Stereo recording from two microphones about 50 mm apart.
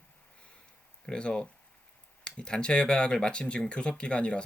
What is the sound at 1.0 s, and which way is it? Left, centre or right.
Speech, centre.